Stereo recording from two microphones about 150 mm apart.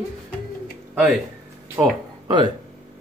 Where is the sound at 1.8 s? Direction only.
25° right (ahead or behind).